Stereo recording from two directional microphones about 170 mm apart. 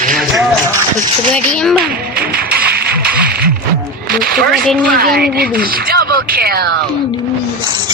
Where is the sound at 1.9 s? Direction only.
60° right (ahead or behind).